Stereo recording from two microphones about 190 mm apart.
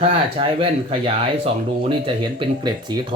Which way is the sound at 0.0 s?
30° right (ahead or behind).